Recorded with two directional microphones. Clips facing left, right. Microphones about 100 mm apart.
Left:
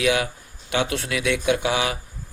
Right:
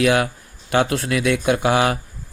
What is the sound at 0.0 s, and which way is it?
Speech, 50° right (ahead or behind).